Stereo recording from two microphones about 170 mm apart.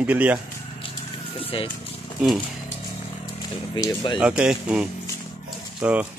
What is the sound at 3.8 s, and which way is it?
Speech, 25° left (ahead or behind).